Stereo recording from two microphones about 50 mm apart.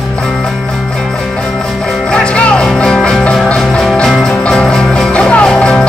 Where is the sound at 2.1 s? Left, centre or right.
Centre.